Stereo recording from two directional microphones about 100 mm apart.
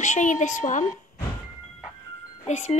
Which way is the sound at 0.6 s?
85° left.